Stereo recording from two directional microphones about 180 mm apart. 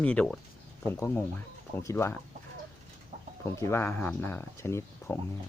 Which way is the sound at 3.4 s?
15° left (ahead or behind).